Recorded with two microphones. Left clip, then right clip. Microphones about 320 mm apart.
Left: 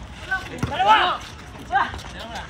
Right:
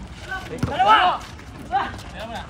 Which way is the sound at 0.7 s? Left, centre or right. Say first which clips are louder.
Right 1 dB; right.